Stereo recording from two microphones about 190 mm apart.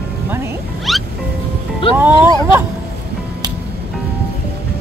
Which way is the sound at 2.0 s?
10° right (ahead or behind).